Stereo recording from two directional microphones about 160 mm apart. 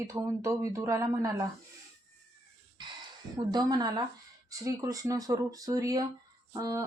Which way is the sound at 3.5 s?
25° right (ahead or behind).